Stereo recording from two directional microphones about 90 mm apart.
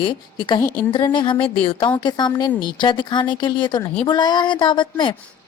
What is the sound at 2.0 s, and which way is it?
A woman's voice, 55° left (ahead or behind).